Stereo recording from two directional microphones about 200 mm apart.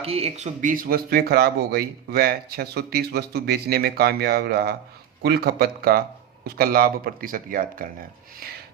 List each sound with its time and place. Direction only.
0.0 s speech: 30° right (ahead or behind)